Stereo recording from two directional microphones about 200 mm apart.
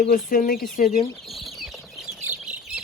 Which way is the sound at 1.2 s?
Centre (ahead or behind).